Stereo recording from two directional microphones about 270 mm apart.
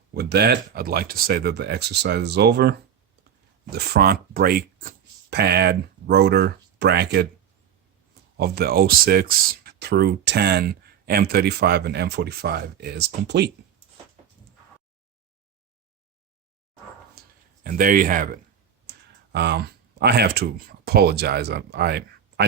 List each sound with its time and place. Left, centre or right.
0.1 s speech: right
8.4 s speech: right
17.6 s speech: right